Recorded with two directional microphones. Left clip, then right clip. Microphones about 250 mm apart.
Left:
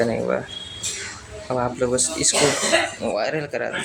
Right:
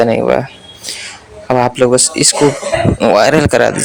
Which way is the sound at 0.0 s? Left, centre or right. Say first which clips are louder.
Right 11 dB; right.